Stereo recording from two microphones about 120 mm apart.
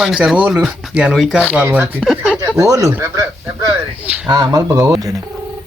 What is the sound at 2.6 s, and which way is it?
Speech, 25° right (ahead or behind).